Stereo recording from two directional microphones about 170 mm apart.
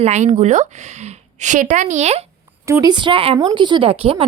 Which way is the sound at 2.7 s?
20° right (ahead or behind).